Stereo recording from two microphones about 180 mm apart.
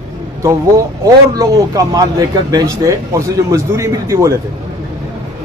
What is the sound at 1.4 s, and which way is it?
Speech, 20° right (ahead or behind).